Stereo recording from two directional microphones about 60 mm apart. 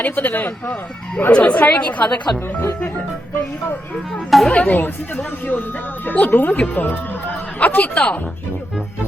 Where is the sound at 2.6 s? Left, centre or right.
Left.